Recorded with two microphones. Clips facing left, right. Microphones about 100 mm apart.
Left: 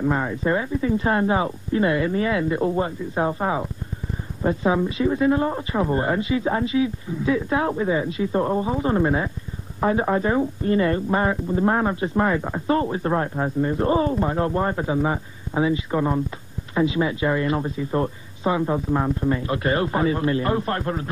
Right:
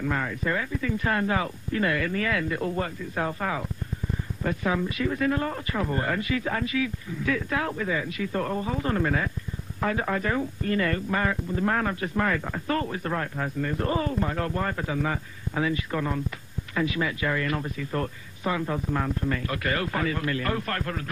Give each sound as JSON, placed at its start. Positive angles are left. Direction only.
{"t": 0.0, "sound": "speech", "side_deg": 25}